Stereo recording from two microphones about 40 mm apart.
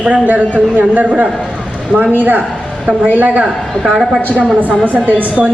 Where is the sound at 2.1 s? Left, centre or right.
Right.